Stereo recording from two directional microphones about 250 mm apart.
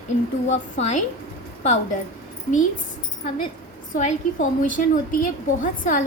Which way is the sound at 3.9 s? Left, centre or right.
Left.